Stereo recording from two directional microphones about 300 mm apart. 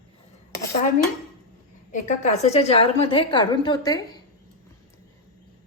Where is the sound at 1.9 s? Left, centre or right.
Left.